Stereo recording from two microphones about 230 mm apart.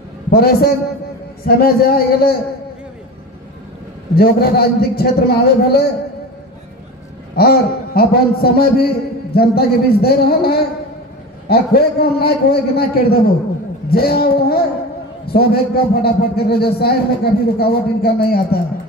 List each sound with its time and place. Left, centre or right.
0.3 s speech: left
4.1 s a man's voice: left
7.3 s a man's voice: left